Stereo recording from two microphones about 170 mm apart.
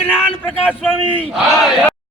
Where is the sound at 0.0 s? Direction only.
10° left (ahead or behind).